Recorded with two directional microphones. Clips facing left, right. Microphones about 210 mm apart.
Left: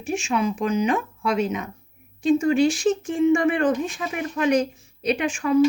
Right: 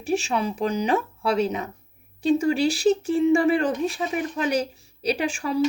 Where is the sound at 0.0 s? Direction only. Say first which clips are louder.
Even; 35° right (ahead or behind).